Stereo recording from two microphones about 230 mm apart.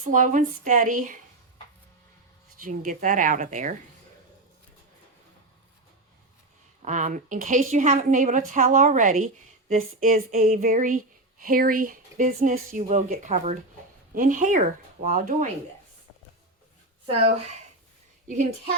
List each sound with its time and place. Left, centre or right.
0.1 s a woman's voice: right
2.6 s a woman's voice: right
6.8 s a woman's voice: right